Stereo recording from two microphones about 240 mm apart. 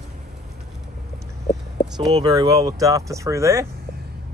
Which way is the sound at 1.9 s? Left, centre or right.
Centre.